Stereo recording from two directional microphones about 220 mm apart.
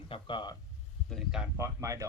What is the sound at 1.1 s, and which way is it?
Speech, centre (ahead or behind).